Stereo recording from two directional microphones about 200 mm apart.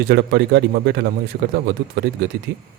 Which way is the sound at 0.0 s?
55° right (ahead or behind).